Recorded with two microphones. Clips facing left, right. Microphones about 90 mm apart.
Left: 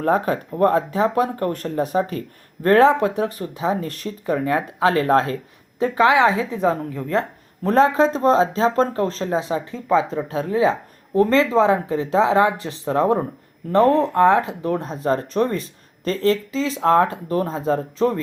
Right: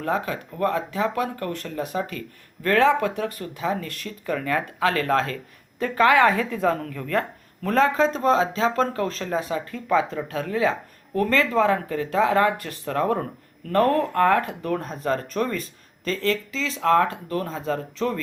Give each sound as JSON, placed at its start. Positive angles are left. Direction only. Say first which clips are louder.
{"t": 0.0, "sound": "speech", "louder": "left 6 dB", "side_deg": 40}
{"t": 5.9, "sound": "a woman's voice", "louder": "left 1 dB", "side_deg": 15}